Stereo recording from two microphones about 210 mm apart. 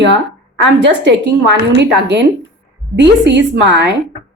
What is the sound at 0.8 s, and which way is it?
A woman's voice, 55° right (ahead or behind).